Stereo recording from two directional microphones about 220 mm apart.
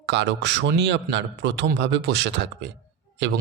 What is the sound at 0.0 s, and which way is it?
Speech, 55° right (ahead or behind).